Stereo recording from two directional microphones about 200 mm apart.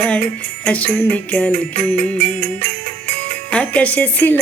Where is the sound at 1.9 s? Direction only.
30° right (ahead or behind).